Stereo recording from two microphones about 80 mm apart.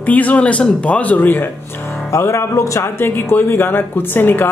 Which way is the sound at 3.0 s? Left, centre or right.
Left.